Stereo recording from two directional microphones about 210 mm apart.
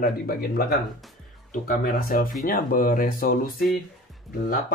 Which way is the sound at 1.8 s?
40° left (ahead or behind).